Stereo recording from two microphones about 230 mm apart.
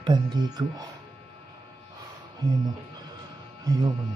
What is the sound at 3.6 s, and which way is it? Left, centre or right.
Speech, centre.